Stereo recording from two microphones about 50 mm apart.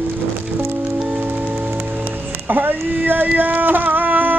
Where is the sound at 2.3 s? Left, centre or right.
Right.